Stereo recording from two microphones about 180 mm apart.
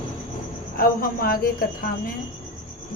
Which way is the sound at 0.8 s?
55° left (ahead or behind).